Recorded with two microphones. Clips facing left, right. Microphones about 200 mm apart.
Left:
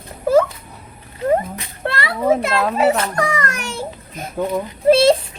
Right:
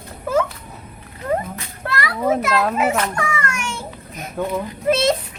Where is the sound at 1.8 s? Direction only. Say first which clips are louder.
Left 2 dB; 25° left (ahead or behind).